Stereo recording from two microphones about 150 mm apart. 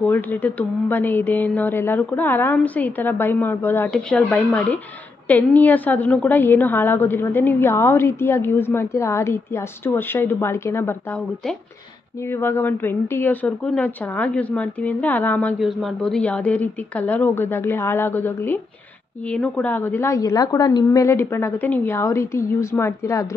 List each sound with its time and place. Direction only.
0.0 s a woman's voice: 10° left (ahead or behind)
15.6 s a woman's voice: centre (ahead or behind); by 23.2 s 20° left (ahead or behind)